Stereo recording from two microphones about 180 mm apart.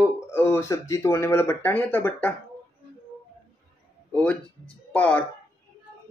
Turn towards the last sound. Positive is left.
turn(degrees=5)  # may be behind; listen again after turning